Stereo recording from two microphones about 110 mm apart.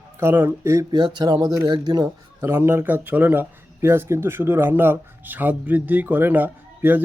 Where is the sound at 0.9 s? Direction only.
45° right (ahead or behind).